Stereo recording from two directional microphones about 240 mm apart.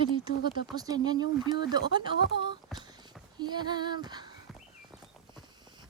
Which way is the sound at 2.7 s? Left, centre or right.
Centre.